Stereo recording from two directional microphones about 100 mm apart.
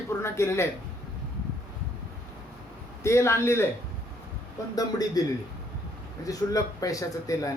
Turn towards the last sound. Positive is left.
turn(degrees=35)  # may be behind; listen again after turning